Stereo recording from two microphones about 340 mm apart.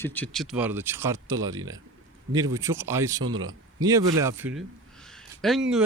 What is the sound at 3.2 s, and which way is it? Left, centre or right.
Speech, right.